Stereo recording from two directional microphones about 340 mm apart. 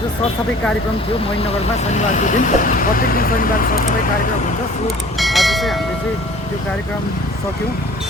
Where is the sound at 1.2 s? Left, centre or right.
Centre.